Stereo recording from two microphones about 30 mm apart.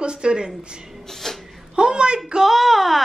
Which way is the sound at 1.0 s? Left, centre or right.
Centre.